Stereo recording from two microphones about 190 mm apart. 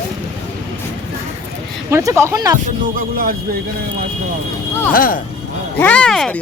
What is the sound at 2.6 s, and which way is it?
Speech, 50° right (ahead or behind).